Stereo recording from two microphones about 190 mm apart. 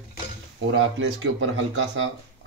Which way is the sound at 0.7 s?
85° right.